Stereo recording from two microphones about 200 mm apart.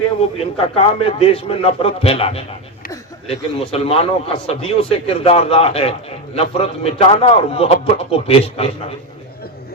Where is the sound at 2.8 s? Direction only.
45° left (ahead or behind).